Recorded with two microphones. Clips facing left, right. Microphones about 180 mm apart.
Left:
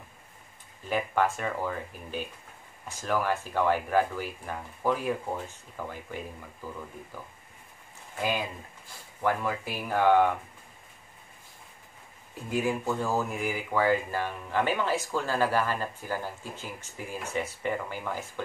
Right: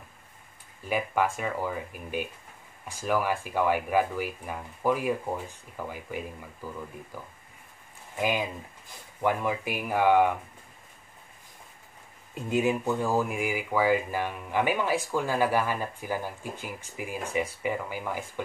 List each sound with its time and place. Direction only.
0.8 s speech: 10° right (ahead or behind)
8.2 s speech: 15° right (ahead or behind)
12.4 s speech: 20° right (ahead or behind)